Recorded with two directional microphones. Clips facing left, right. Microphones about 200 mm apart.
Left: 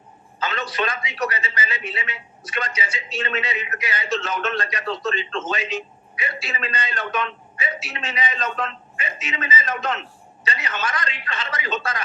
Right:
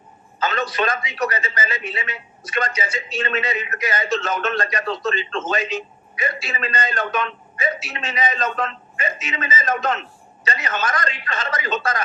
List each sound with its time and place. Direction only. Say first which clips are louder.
0.3 s a man's voice: right 3 dB; 45° right (ahead or behind)